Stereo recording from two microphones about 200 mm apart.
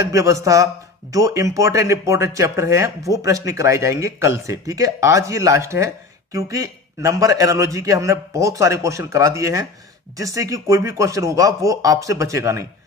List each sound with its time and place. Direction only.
0.0 s speech: 15° right (ahead or behind)